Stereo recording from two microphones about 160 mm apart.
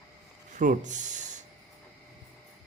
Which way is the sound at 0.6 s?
50° right (ahead or behind).